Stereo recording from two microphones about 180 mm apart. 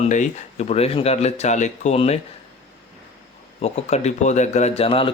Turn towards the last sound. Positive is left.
turn(degrees=30)  # may be behind; listen again after turning